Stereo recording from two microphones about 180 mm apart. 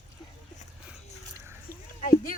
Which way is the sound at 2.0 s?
50° left (ahead or behind).